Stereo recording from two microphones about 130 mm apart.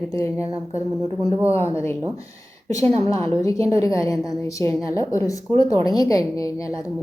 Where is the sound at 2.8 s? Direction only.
55° right (ahead or behind).